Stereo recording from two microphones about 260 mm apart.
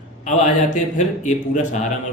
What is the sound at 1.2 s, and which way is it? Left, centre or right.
Speech, left.